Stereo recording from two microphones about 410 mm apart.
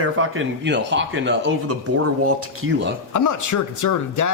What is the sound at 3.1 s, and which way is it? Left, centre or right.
Speech, left.